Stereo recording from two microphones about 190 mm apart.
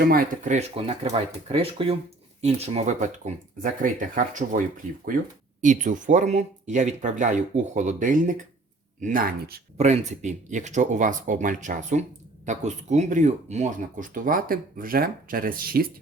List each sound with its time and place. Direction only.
0.0 s speech: 50° right (ahead or behind)
5.6 s speech: 40° right (ahead or behind)
9.7 s speech: 35° right (ahead or behind); by 15.9 s 50° right (ahead or behind)